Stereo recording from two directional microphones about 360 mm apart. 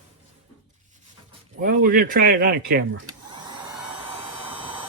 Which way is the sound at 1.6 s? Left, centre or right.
Right.